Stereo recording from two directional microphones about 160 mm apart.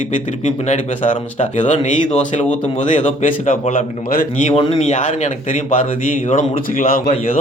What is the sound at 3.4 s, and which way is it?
A man's voice, 55° left (ahead or behind).